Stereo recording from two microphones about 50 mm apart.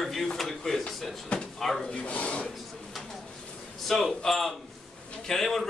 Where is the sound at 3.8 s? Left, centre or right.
Centre.